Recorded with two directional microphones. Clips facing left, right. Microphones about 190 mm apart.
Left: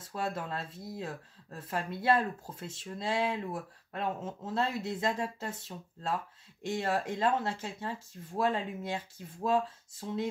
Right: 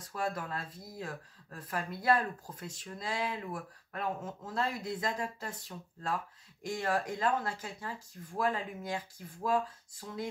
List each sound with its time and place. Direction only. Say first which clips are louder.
0.0 s speech: left 1 dB; 25° left (ahead or behind)